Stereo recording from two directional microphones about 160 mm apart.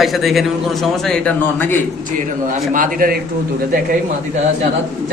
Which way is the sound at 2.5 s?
55° right (ahead or behind).